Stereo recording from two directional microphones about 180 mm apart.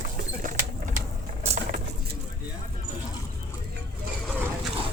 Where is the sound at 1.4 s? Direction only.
40° right (ahead or behind).